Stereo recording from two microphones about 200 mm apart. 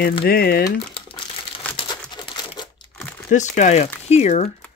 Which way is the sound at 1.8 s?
20° left (ahead or behind).